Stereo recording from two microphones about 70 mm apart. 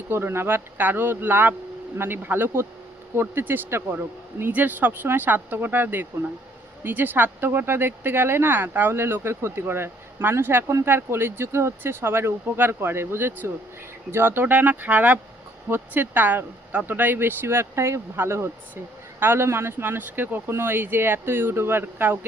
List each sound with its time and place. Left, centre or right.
0.1 s speech: right